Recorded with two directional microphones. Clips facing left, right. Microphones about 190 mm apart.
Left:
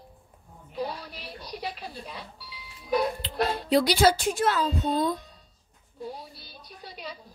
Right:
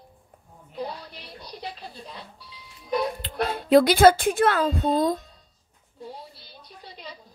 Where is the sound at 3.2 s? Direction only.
50° right (ahead or behind).